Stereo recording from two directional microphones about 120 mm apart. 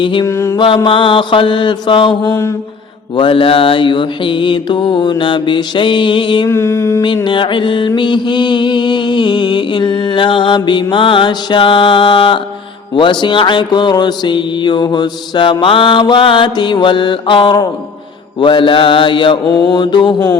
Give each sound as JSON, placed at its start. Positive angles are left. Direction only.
{"t": 0.0, "sound": "mantra", "side_deg": 40}
{"t": 0.3, "sound": "mantra", "side_deg": 25}
{"t": 0.9, "sound": "mantra", "side_deg": 45}
{"t": 6.5, "sound": "mantra", "side_deg": 25}
{"t": 7.3, "sound": "mantra", "side_deg": 45}